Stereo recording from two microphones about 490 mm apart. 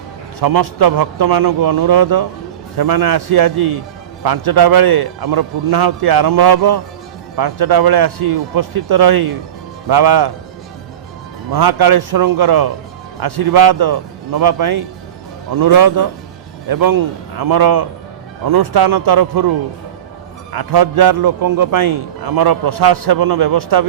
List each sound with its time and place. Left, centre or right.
0.3 s a man's voice: right
11.5 s a man's voice: right
20.5 s a man's voice: right